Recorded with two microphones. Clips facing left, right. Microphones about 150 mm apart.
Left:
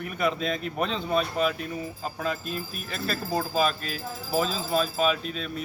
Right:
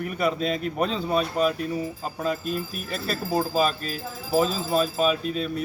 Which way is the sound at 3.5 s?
40° right (ahead or behind).